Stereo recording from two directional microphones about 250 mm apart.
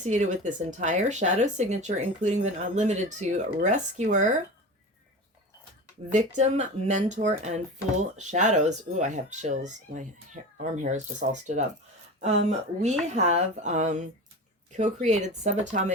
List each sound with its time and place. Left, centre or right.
0.0 s speech: right
6.1 s speech: right